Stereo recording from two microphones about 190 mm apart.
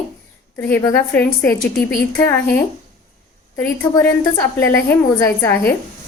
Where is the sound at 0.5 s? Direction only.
10° left (ahead or behind).